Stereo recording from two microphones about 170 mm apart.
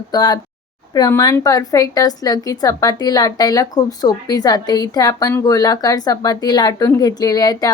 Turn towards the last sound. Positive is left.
turn(degrees=20)  # may be behind; listen again after turning